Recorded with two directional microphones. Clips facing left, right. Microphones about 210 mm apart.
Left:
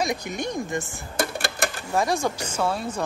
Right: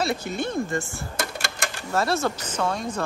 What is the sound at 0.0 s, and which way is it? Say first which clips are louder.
A woman's voice: right 1 dB; 15° left (ahead or behind).